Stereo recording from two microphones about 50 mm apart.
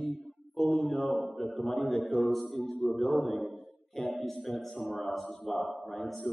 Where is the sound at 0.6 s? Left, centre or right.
Centre.